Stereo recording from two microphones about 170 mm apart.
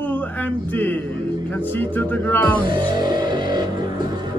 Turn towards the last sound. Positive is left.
turn(degrees=-25)  # may be behind; listen again after turning